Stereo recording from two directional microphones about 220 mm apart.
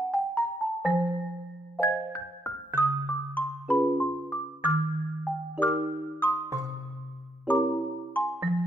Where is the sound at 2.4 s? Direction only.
5° left (ahead or behind).